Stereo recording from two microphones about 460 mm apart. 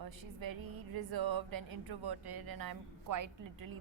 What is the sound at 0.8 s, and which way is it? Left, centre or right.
Speech, right.